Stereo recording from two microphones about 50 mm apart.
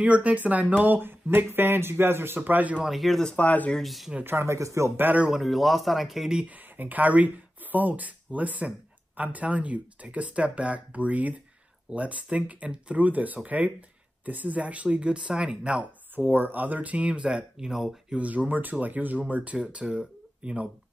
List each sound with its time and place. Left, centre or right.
0.0 s speech: right
2.8 s a man's voice: centre
3.3 s speech: left
3.7 s a man's voice: centre
4.4 s speech: right
5.3 s a man's voice: centre
6.4 s speech: right
16.2 s speech: right; by 17.9 s centre
18.1 s speech: right